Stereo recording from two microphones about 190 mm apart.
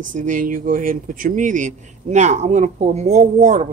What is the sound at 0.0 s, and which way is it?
Speech, 45° right (ahead or behind).